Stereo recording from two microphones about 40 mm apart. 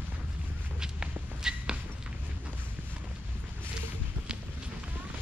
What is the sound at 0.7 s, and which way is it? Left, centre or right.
Walk, centre.